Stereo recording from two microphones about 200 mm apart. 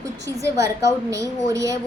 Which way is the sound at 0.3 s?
15° right (ahead or behind).